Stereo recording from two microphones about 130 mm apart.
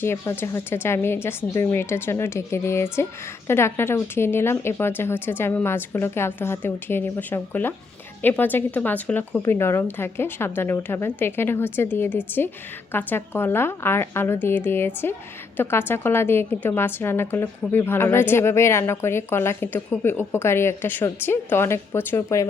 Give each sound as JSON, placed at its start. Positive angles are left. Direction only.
{"t": 0.0, "sound": "a woman's voice", "side_deg": 20}